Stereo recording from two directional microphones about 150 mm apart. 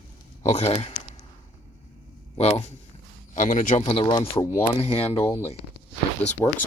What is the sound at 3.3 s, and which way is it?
Speech, 60° left (ahead or behind).